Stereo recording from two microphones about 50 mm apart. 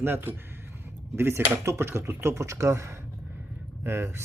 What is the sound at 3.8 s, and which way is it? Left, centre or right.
Speech, right.